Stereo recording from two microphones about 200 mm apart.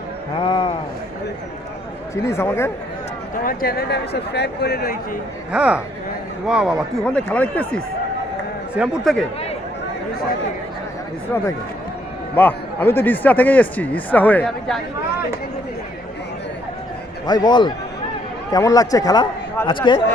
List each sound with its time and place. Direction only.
0.3 s speech: 25° left (ahead or behind)
2.2 s speech: 15° left (ahead or behind)
3.4 s speech: 45° left (ahead or behind)
5.5 s speech: 5° right (ahead or behind)
8.7 s speech: 5° right (ahead or behind)
12.4 s speech: 10° left (ahead or behind)
17.2 s speech: 20° left (ahead or behind)